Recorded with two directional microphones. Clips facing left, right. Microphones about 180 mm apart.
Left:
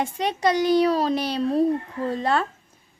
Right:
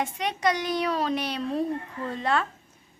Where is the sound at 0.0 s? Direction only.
30° left (ahead or behind).